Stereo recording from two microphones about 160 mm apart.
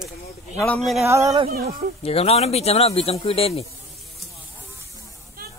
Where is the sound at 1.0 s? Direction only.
20° right (ahead or behind).